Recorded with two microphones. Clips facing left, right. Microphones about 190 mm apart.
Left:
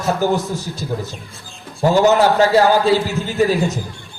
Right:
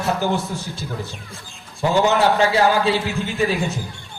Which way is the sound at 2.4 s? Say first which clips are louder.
Left 4 dB; 40° left (ahead or behind).